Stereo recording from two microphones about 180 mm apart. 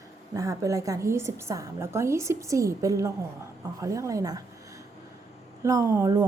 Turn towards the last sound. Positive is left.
turn(degrees=-15)  # may be behind; listen again after turning